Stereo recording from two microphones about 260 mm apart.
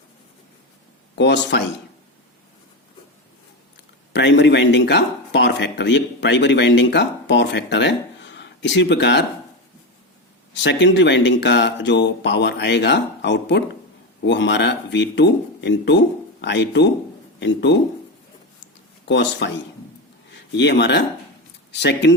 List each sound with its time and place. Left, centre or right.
1.2 s speech: left
4.1 s speech: left
10.5 s speech: left
19.0 s speech: left